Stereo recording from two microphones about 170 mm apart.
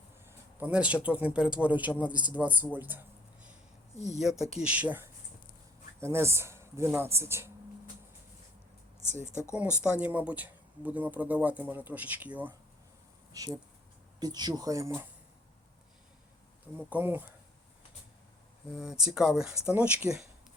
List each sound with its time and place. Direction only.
0.3 s speech: 10° right (ahead or behind)
3.9 s speech: 40° left (ahead or behind)
4.2 s speech: centre (ahead or behind)
9.0 s speech: 45° right (ahead or behind)
9.3 s speech: 15° left (ahead or behind)
9.8 s speech: 10° right (ahead or behind)
13.3 s speech: 20° right (ahead or behind)
16.7 s speech: 10° right (ahead or behind)
18.7 s speech: 5° right (ahead or behind)